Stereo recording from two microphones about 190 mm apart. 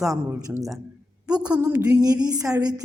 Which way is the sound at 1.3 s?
20° right (ahead or behind).